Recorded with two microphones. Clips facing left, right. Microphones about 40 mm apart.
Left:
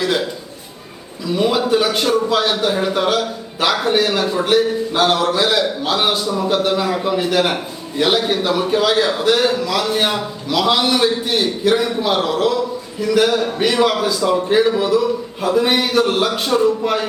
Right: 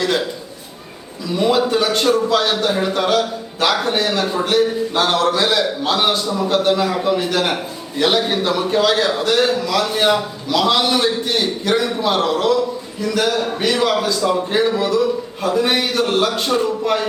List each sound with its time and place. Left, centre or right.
1.5 s a man's voice: centre